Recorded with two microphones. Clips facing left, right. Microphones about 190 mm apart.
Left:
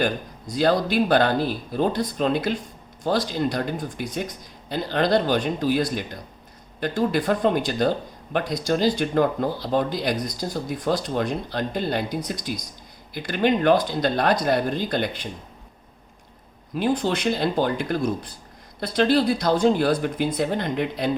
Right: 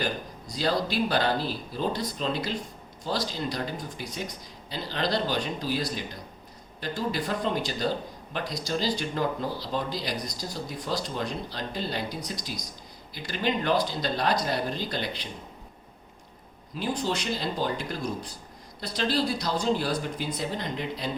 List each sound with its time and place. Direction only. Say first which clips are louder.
0.0 s speech: left 6 dB; 55° left (ahead or behind)
16.7 s speech: left 6 dB; 55° left (ahead or behind)